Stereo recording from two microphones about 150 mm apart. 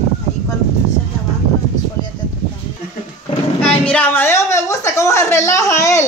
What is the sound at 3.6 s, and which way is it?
A woman's voice, 5° left (ahead or behind).